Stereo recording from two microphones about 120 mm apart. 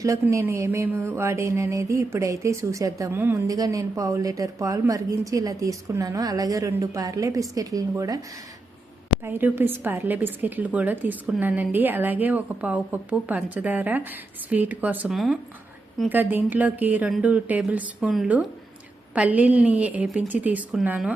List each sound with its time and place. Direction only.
0.0 s a sound: 25° right (ahead or behind)
9.2 s a woman's voice: 15° right (ahead or behind)
15.1 s speech: centre (ahead or behind)
16.0 s a woman's voice: 15° right (ahead or behind)
19.1 s a woman's voice: 10° right (ahead or behind)